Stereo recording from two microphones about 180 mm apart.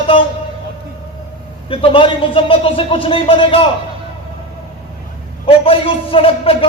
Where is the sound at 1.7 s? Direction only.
30° left (ahead or behind).